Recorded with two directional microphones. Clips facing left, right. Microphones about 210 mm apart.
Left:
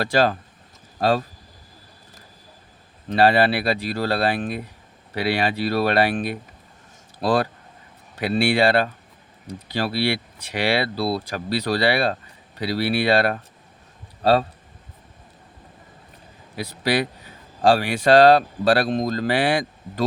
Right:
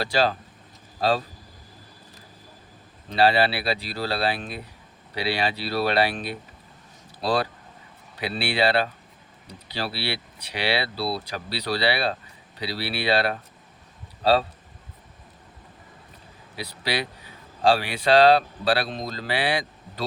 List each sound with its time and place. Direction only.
0.0 s speech: 50° left (ahead or behind)
3.1 s speech: 50° left (ahead or behind)
16.6 s speech: 50° left (ahead or behind)